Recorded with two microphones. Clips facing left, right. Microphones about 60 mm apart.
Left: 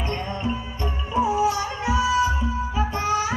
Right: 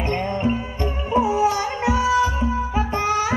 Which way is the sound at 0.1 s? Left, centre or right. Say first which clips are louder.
Right 7 dB; right.